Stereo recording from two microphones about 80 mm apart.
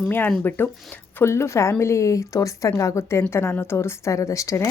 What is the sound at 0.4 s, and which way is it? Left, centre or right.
Speech, left.